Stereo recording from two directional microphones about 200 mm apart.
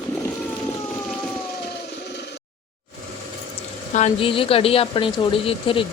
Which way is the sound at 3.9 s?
30° left (ahead or behind).